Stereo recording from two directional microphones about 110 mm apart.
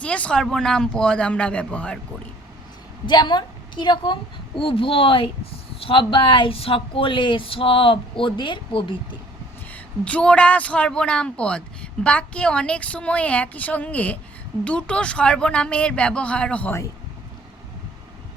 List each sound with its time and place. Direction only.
0.0 s a woman's voice: 10° left (ahead or behind)
3.1 s speech: 40° left (ahead or behind)
9.7 s a woman's voice: 10° left (ahead or behind)